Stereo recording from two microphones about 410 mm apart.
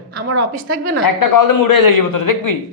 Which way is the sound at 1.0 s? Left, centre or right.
Left.